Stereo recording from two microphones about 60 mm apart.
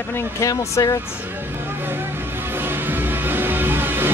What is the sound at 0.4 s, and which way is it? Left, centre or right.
Speech, left.